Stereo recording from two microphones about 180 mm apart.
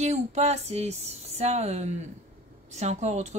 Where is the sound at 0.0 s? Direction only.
40° right (ahead or behind).